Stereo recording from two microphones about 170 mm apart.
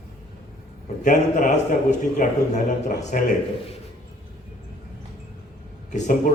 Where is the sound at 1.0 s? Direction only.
50° left (ahead or behind).